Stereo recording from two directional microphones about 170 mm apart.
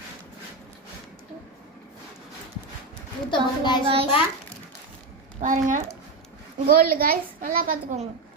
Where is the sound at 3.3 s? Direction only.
25° left (ahead or behind).